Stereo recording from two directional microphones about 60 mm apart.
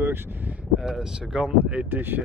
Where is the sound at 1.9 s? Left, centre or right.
Right.